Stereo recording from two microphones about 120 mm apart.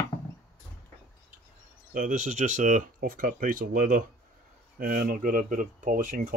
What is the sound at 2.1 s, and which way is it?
Speech, 90° right.